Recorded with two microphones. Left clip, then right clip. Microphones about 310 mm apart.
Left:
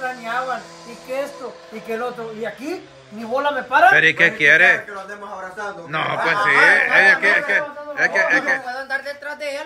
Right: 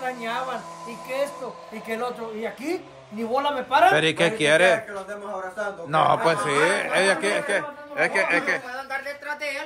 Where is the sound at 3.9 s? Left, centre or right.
Centre.